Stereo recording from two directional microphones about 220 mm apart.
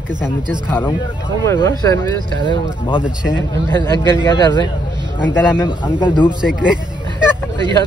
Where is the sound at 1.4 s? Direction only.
15° left (ahead or behind).